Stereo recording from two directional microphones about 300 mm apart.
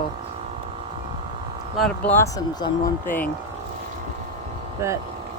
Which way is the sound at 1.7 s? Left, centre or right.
Centre.